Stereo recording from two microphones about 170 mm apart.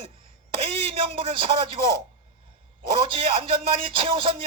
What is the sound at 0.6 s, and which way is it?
Speech, 30° right (ahead or behind).